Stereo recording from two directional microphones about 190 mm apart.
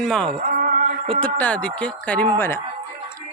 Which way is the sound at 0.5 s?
45° right (ahead or behind).